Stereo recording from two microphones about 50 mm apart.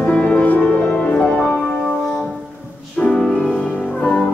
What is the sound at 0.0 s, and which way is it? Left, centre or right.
Music, left.